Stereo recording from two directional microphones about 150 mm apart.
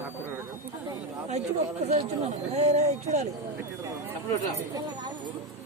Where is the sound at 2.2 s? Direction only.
45° right (ahead or behind).